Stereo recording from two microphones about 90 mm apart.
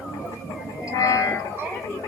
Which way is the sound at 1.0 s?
40° left (ahead or behind).